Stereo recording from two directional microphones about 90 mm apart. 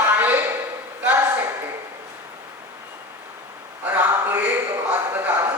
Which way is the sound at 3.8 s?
20° right (ahead or behind).